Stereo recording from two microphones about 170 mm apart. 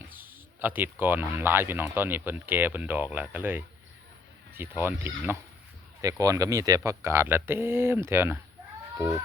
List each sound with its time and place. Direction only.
0.2 s speech: 10° right (ahead or behind)